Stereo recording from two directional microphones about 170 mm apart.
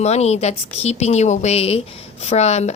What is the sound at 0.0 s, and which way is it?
A woman's voice, 40° left (ahead or behind).